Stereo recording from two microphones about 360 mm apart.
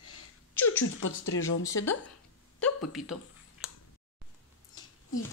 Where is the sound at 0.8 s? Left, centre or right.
Left.